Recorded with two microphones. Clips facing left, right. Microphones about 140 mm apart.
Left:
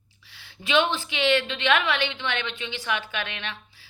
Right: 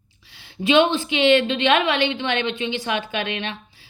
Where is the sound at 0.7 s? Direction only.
20° right (ahead or behind).